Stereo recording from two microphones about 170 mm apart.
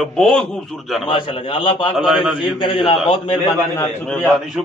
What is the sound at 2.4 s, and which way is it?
Speech, 30° left (ahead or behind).